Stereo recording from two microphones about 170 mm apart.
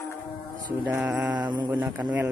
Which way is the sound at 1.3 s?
25° right (ahead or behind).